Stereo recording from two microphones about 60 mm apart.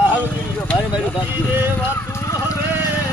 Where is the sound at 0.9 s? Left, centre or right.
Left.